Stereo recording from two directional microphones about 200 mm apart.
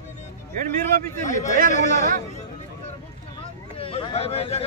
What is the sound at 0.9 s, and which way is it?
Speech, 45° right (ahead or behind).